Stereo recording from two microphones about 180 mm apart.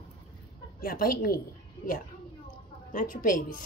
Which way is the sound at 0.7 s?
55° left (ahead or behind).